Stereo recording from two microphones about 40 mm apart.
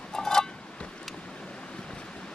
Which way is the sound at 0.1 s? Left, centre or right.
Centre.